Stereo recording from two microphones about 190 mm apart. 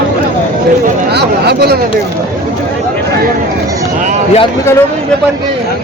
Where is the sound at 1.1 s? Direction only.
60° right (ahead or behind).